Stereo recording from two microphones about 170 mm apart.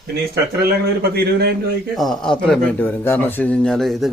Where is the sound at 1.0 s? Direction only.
65° right (ahead or behind).